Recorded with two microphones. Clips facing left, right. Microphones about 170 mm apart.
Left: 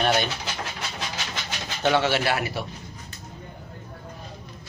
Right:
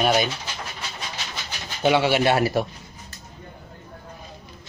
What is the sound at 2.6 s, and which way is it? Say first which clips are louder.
Speech: right 8 dB; 50° right (ahead or behind).